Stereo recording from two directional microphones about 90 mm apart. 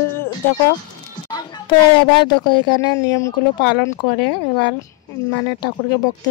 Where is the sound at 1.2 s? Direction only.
50° left (ahead or behind).